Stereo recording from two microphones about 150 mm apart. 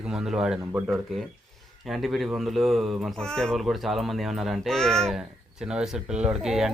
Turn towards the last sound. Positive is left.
turn(degrees=-5)  # may be behind; listen again after turning